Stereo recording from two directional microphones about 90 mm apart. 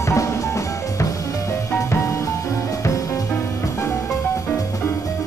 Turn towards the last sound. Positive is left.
turn(degrees=30)  # may be behind; listen again after turning